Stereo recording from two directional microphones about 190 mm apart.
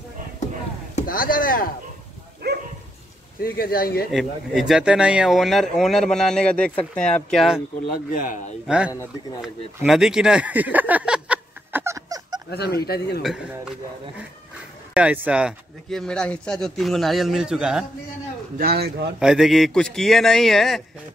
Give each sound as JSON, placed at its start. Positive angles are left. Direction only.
{"t": 0.9, "sound": "chop", "side_deg": 50}
{"t": 2.4, "sound": "dog", "side_deg": -60}
{"t": 3.3, "sound": "speech", "side_deg": 50}
{"t": 4.1, "sound": "speech", "side_deg": 0}
{"t": 8.1, "sound": "speech", "side_deg": 45}
{"t": 8.6, "sound": "speech", "side_deg": -5}
{"t": 9.8, "sound": "a sound", "side_deg": 0}
{"t": 12.4, "sound": "speech", "side_deg": 60}
{"t": 13.2, "sound": "speech", "side_deg": -5}
{"t": 15.0, "sound": "speech", "side_deg": -5}
{"t": 18.6, "sound": "a man's voice", "side_deg": -55}
{"t": 19.1, "sound": "speech", "side_deg": -5}